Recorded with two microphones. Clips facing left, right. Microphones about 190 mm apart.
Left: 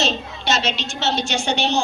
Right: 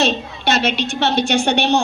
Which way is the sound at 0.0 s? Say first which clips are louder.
Right 5 dB; 60° right (ahead or behind).